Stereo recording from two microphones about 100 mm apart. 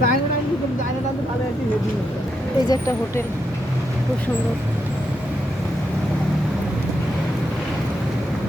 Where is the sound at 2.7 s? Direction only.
30° left (ahead or behind).